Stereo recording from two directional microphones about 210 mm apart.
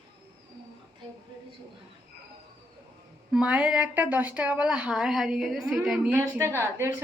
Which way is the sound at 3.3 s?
5° right (ahead or behind).